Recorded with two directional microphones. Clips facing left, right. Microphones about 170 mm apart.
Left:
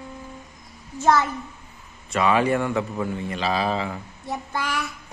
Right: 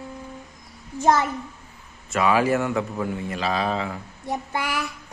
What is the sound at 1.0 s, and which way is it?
Speech, 15° right (ahead or behind).